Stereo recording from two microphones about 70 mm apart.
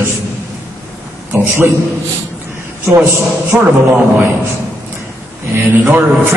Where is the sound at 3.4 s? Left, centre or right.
Right.